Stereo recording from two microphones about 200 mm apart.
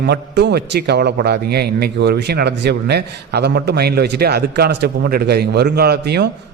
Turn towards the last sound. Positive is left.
turn(degrees=-55)  # may be behind; listen again after turning